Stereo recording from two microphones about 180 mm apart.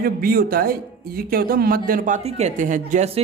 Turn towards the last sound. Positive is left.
turn(degrees=-45)  # may be behind; listen again after turning